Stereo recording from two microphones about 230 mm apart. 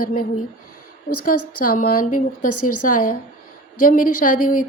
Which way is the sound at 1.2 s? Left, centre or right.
Left.